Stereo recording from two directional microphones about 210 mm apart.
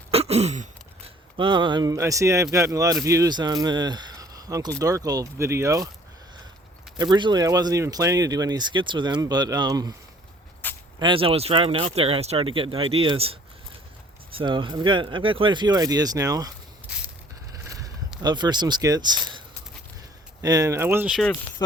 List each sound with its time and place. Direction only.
0.1 s a sound: 30° right (ahead or behind)
1.4 s speech: 20° right (ahead or behind)
7.0 s speech: 20° right (ahead or behind)
10.6 s a sound: 10° left (ahead or behind)
11.0 s speech: 25° right (ahead or behind)
14.3 s speech: 25° right (ahead or behind)
18.2 s speech: 20° right (ahead or behind)
20.4 s speech: 15° right (ahead or behind)